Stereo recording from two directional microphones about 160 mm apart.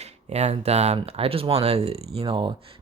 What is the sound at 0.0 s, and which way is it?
Speech, 45° right (ahead or behind).